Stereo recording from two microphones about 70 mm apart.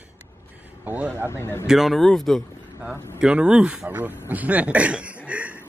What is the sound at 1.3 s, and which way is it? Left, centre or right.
Speech, left.